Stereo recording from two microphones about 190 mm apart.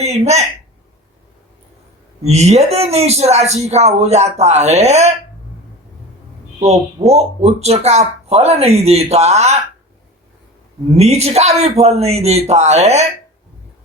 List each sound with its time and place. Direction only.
0.0 s speech: 35° right (ahead or behind)
2.2 s speech: 35° right (ahead or behind)
6.6 s speech: 35° right (ahead or behind)
10.9 s speech: 35° right (ahead or behind)